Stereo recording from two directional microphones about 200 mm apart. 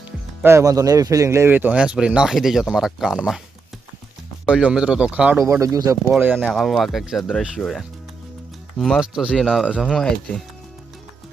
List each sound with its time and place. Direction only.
0.4 s speech: 15° right (ahead or behind)
4.4 s speech: 5° right (ahead or behind)